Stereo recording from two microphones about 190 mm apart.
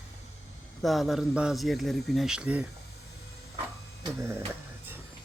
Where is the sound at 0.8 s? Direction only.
Centre (ahead or behind).